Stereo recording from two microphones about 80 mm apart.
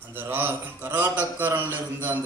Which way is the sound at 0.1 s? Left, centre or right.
Right.